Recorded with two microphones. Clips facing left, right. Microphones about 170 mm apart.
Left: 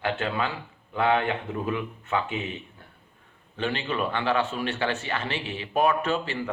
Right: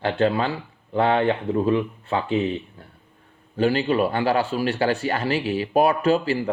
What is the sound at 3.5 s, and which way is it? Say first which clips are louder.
Speech: right 9 dB; 35° right (ahead or behind).